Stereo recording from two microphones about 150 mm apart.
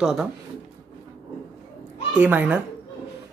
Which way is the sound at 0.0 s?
5° right (ahead or behind).